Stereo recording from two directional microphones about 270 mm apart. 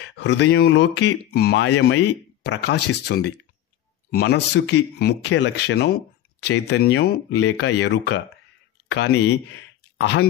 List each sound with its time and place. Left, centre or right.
0.0 s speech: left